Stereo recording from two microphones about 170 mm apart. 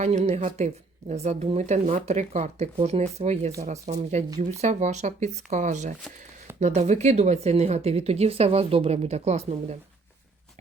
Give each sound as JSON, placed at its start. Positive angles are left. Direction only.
{"t": 0.0, "sound": "speech", "side_deg": -40}